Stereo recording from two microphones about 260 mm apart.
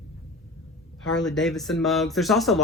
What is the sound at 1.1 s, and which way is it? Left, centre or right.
Speech, centre.